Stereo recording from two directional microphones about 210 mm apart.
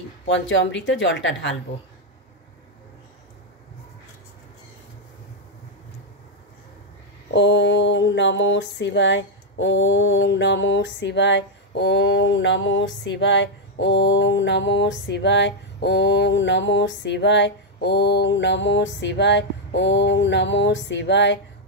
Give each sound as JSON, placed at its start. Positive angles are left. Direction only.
{"t": 0.3, "sound": "mantra", "side_deg": 60}
{"t": 7.2, "sound": "mantra", "side_deg": 55}